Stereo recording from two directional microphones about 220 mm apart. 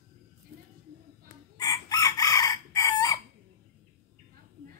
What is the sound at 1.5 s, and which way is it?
Chicken, 15° left (ahead or behind).